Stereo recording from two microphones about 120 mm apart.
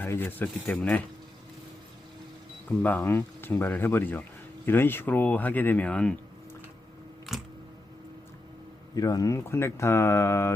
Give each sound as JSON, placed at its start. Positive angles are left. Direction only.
{"t": 0.0, "sound": "speech", "side_deg": 15}
{"t": 2.6, "sound": "speech", "side_deg": 15}
{"t": 7.3, "sound": "camera", "side_deg": 0}
{"t": 9.0, "sound": "speech", "side_deg": 30}